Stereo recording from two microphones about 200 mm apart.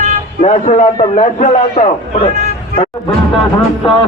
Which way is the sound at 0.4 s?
35° left (ahead or behind).